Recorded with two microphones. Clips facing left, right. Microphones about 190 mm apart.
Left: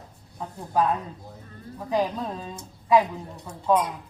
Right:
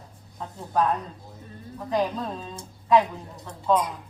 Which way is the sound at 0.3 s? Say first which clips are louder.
Left 1 dB; 10° left (ahead or behind).